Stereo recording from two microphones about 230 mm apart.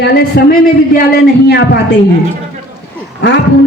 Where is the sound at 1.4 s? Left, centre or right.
Left.